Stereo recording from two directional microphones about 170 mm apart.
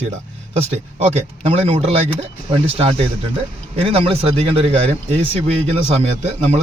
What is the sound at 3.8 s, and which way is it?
A man's voice, 35° right (ahead or behind).